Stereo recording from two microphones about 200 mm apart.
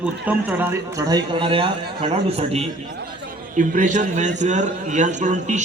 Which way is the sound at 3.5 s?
40° right (ahead or behind).